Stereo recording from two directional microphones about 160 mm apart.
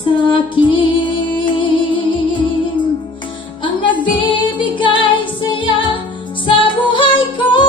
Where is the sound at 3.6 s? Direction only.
30° left (ahead or behind).